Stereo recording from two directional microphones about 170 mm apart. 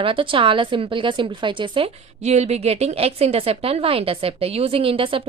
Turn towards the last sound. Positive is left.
turn(degrees=-30)  # may be behind; listen again after turning